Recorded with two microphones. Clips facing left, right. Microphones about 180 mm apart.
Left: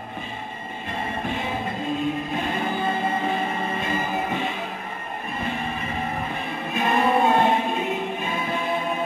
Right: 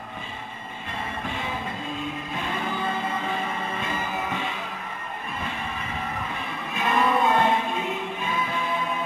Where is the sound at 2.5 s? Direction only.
45° left (ahead or behind).